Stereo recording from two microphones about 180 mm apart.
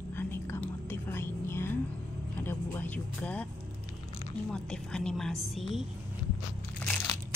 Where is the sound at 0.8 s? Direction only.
10° left (ahead or behind).